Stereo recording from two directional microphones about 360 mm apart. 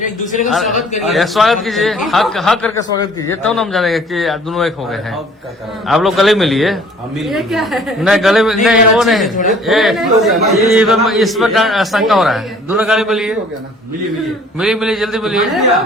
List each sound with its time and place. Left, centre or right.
0.0 s a man's voice: left
0.4 s a man's voice: centre
14.6 s a man's voice: centre